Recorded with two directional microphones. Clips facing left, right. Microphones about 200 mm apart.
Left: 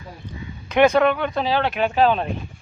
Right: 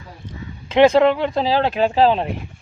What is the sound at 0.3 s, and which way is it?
Speech, 25° right (ahead or behind).